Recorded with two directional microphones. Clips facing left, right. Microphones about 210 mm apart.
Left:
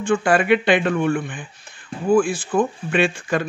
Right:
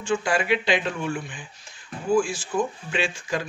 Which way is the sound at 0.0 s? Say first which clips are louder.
Left 6 dB; 55° left (ahead or behind).